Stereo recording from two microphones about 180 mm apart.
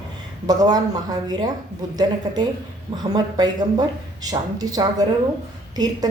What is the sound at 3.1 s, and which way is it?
A woman's voice, 20° right (ahead or behind).